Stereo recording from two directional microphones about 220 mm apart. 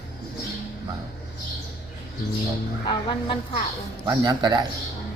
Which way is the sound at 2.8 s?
20° left (ahead or behind).